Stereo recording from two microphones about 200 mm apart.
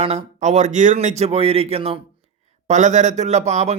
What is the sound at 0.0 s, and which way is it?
Speech, 30° right (ahead or behind).